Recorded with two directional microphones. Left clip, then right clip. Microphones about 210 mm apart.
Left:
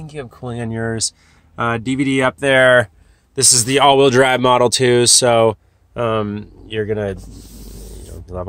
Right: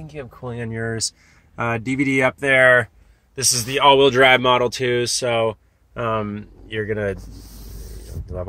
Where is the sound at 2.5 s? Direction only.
20° left (ahead or behind).